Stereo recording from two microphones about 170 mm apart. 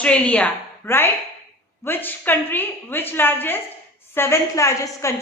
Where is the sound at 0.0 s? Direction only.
5° left (ahead or behind).